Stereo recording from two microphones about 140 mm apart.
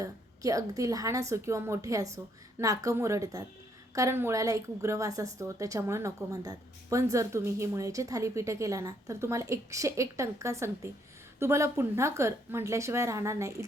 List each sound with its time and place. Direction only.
0.0 s a woman's voice: 25° right (ahead or behind)